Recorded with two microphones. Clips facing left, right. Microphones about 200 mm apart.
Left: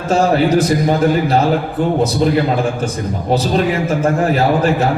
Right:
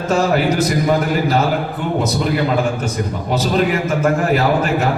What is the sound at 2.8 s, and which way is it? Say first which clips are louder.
A man's voice: left 2 dB; 35° left (ahead or behind).